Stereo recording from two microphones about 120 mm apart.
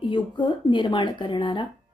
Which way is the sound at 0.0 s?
40° left (ahead or behind).